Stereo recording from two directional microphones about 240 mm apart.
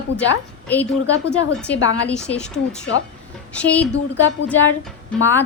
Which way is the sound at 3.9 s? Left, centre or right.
Left.